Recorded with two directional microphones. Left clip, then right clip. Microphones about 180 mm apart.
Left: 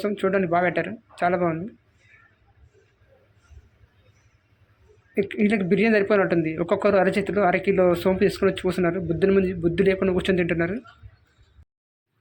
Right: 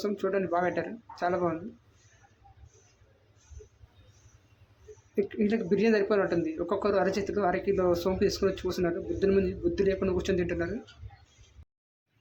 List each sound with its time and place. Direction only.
0.0 s speech: 15° left (ahead or behind)
5.1 s speech: 15° left (ahead or behind)